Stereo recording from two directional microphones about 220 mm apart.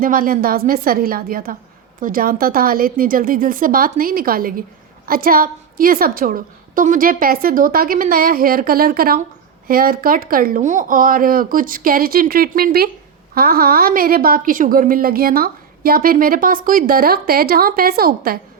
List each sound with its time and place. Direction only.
0.0 s a woman's voice: 40° right (ahead or behind)